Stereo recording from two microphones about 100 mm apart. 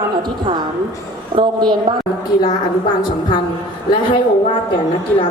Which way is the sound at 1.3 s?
50° right (ahead or behind).